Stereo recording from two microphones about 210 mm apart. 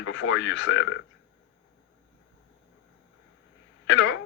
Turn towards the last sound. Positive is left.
turn(degrees=65)  # may be behind; listen again after turning